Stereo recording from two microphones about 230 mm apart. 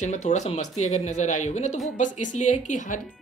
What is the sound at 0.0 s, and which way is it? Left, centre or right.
Speech, left.